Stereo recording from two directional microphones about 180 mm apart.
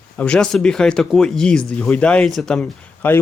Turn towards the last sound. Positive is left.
turn(degrees=10)  # may be behind; listen again after turning